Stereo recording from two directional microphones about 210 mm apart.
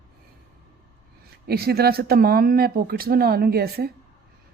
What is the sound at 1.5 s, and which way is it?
Speech, 50° right (ahead or behind).